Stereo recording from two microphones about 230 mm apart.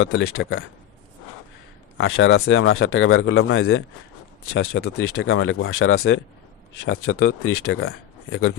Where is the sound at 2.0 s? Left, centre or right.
Left.